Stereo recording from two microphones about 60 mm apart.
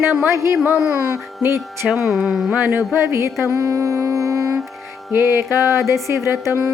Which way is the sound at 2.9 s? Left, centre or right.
Right.